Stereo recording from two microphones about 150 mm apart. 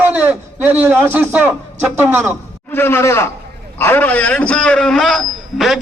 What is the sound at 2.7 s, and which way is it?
A man's voice, 15° left (ahead or behind).